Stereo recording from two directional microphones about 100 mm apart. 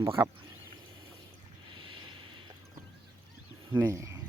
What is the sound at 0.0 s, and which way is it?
Speech, 25° right (ahead or behind).